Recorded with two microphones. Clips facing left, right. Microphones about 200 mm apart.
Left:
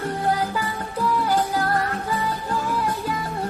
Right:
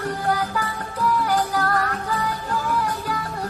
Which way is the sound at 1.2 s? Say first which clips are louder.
Even; 25° left (ahead or behind).